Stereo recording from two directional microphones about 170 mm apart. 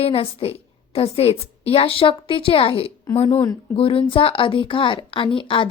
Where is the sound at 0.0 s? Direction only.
35° left (ahead or behind).